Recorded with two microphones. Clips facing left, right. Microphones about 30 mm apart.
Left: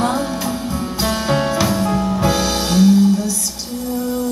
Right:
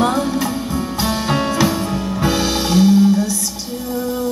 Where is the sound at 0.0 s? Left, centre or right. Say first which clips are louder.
Right 2 dB; centre.